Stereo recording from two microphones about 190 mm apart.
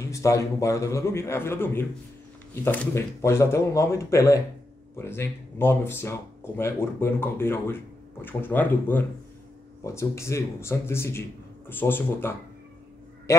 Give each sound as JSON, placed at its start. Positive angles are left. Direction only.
{"t": 0.1, "sound": "speech", "side_deg": 15}